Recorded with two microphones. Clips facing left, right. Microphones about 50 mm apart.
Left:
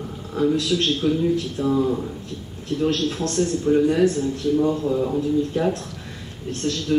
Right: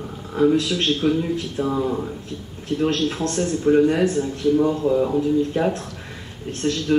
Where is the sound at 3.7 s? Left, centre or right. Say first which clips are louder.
Even; right.